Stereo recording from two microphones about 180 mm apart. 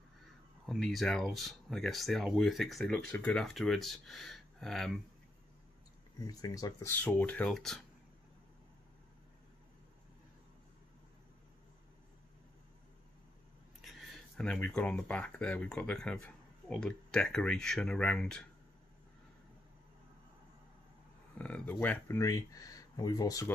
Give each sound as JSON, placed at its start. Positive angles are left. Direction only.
{"t": 0.7, "sound": "speech", "side_deg": 0}
{"t": 6.1, "sound": "speech", "side_deg": 20}
{"t": 13.7, "sound": "speech", "side_deg": 0}
{"t": 21.4, "sound": "speech", "side_deg": 10}